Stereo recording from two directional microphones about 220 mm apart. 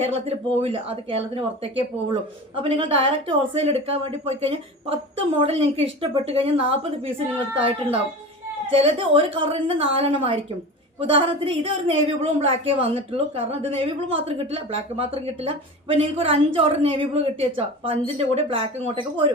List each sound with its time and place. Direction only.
0.0 s a woman's voice: 25° right (ahead or behind)